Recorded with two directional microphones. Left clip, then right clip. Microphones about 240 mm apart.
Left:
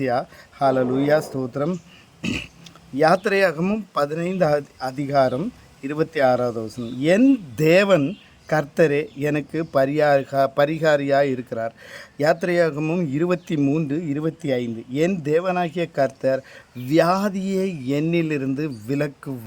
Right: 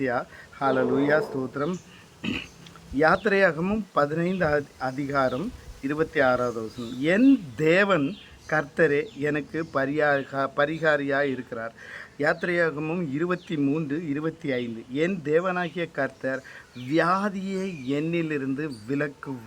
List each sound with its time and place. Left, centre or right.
0.0 s speech: left